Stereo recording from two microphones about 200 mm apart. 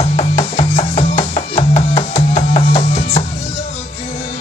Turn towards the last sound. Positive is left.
turn(degrees=35)  # may be behind; listen again after turning